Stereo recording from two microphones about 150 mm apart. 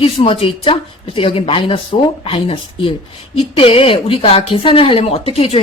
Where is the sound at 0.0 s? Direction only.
40° left (ahead or behind).